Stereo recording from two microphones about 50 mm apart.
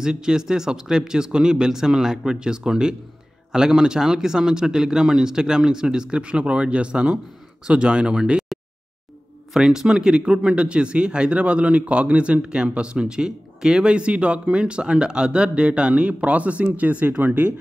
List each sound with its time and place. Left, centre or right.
0.0 s speech: centre
8.5 s a sound: centre
9.5 s speech: centre; by 17.5 s right